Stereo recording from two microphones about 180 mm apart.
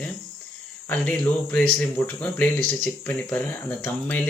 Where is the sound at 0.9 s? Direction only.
10° left (ahead or behind).